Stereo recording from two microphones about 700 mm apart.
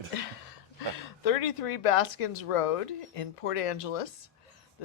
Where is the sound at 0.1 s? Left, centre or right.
Left.